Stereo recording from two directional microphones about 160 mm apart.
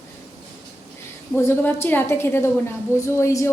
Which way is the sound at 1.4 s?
15° left (ahead or behind).